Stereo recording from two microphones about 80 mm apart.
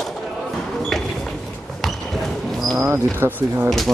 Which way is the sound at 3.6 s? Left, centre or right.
Centre.